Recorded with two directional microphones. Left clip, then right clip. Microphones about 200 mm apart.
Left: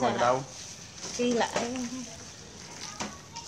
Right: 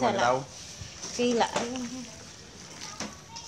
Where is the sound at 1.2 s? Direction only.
40° right (ahead or behind).